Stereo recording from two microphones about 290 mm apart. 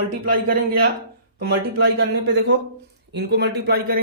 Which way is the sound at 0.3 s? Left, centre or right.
Right.